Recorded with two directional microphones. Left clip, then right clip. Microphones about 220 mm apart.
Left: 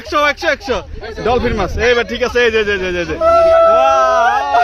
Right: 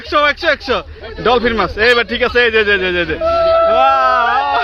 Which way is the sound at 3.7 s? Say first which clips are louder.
Left 1 dB; 5° left (ahead or behind).